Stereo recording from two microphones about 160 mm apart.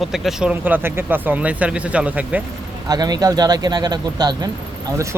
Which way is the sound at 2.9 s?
25° right (ahead or behind).